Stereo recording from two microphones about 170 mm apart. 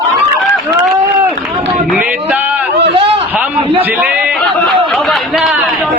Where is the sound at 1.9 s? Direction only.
10° right (ahead or behind).